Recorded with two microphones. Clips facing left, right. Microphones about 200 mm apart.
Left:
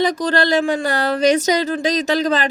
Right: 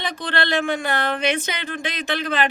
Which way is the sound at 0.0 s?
40° left (ahead or behind).